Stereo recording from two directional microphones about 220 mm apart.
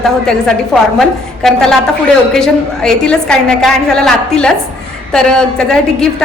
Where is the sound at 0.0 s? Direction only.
Centre (ahead or behind).